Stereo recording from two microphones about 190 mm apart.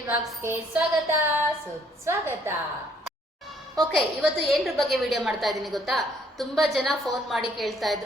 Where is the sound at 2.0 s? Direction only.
15° right (ahead or behind).